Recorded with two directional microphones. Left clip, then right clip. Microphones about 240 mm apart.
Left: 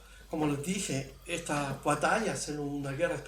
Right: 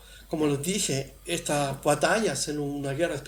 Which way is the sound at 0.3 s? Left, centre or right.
Right.